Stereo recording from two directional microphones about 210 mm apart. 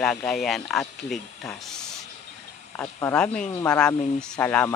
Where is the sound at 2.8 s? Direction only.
10° left (ahead or behind).